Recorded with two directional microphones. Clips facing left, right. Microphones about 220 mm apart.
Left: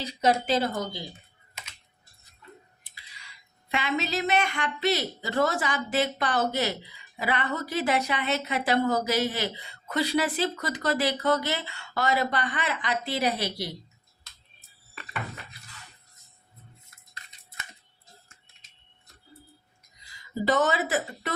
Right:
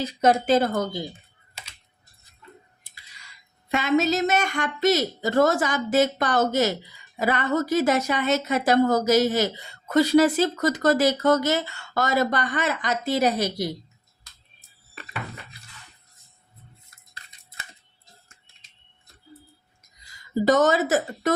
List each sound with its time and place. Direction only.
0.0 s a woman's voice: 50° right (ahead or behind)
1.6 s typing: 35° right (ahead or behind)
3.7 s a woman's voice: 45° right (ahead or behind)
20.4 s a woman's voice: 45° right (ahead or behind)